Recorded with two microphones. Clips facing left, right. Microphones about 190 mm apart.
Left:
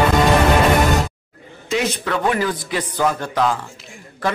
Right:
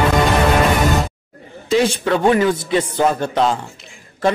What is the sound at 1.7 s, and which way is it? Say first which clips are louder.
A man's voice: right 5 dB; 30° right (ahead or behind).